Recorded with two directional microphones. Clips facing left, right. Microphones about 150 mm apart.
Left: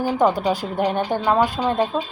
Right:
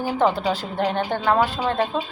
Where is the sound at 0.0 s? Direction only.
15° left (ahead or behind).